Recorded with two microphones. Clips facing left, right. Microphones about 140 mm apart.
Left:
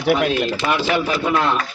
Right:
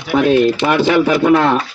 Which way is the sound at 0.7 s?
65° right (ahead or behind).